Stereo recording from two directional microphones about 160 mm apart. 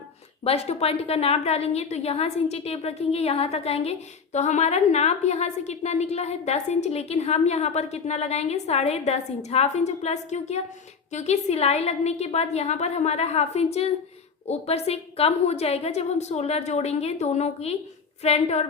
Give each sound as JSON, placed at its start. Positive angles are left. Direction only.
{"t": 0.4, "sound": "a woman's voice", "side_deg": 40}